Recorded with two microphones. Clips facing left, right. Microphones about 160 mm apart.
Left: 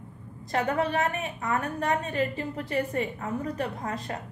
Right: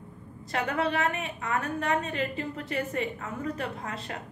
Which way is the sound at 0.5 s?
35° left (ahead or behind).